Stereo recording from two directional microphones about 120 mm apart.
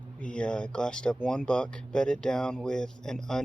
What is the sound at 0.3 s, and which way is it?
Speech, 10° left (ahead or behind).